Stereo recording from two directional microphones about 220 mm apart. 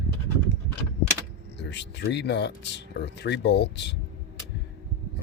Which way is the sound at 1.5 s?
50° left (ahead or behind).